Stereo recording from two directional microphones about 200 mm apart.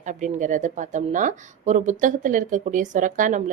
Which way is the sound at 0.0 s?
40° right (ahead or behind).